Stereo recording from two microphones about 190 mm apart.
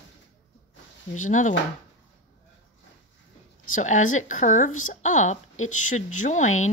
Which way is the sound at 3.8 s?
40° left (ahead or behind).